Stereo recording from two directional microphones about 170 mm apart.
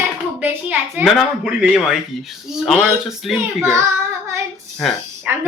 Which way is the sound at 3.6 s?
15° right (ahead or behind).